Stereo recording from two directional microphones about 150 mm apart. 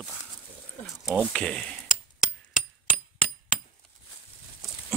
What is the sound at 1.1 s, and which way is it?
Speech, 5° left (ahead or behind).